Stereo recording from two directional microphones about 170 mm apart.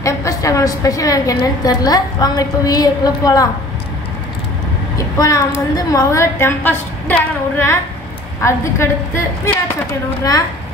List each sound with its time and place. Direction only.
0.0 s a woman's voice: 20° left (ahead or behind)
4.9 s a woman's voice: 20° left (ahead or behind)